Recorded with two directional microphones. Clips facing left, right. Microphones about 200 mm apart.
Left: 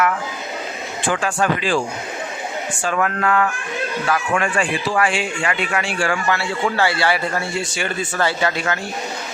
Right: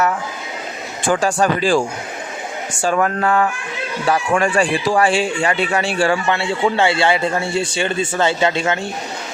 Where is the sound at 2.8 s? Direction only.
35° right (ahead or behind).